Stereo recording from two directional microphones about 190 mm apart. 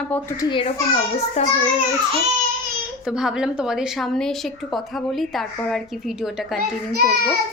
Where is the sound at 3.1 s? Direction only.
5° right (ahead or behind).